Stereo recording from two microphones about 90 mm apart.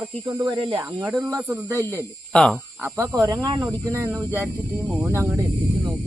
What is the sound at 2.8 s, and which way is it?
Speech, 30° right (ahead or behind).